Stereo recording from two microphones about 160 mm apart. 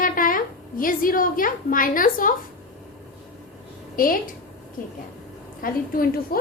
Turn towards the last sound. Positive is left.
turn(degrees=65)  # may be behind; listen again after turning